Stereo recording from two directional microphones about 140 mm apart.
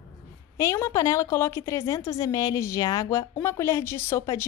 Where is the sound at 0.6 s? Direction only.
20° left (ahead or behind).